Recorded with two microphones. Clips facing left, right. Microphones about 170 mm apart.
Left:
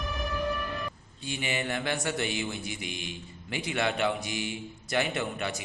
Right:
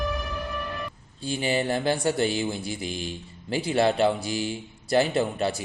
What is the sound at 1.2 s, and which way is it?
Mantra, 35° right (ahead or behind).